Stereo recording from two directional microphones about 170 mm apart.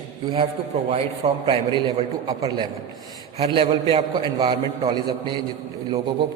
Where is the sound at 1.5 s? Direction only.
30° right (ahead or behind).